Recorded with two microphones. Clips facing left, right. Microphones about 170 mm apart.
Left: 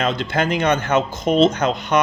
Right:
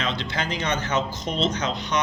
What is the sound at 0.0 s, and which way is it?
Speech, 50° left (ahead or behind).